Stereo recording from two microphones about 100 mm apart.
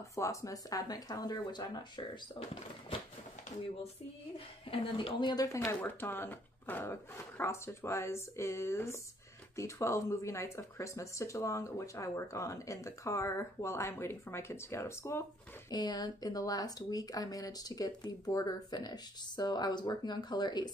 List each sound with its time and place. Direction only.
0.1 s speech: 30° left (ahead or behind)
4.6 s speech: 60° left (ahead or behind)
5.3 s speech: 40° left (ahead or behind)
5.7 s speech: 20° left (ahead or behind)
15.7 s speech: 45° left (ahead or behind)